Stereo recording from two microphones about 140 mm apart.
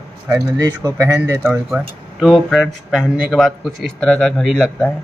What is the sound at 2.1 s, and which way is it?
A man's voice, centre (ahead or behind).